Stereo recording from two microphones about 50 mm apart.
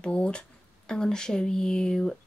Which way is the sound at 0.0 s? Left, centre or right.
Left.